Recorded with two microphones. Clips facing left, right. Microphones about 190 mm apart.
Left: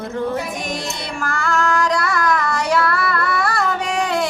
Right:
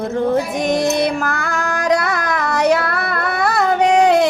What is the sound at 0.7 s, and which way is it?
Female singing, 60° right (ahead or behind).